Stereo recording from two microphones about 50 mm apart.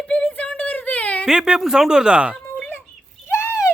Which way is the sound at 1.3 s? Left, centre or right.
Centre.